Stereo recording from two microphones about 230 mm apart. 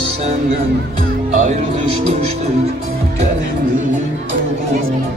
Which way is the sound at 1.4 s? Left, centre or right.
Right.